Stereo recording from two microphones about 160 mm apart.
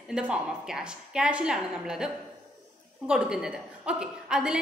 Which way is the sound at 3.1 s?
5° right (ahead or behind).